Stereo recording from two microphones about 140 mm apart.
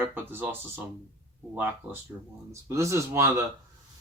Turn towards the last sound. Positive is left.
turn(degrees=-20)  # may be behind; listen again after turning